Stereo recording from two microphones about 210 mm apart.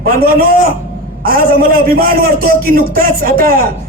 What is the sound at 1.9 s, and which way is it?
A man's voice, 45° right (ahead or behind).